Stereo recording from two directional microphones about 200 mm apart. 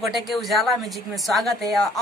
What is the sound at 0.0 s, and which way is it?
Speech, centre (ahead or behind).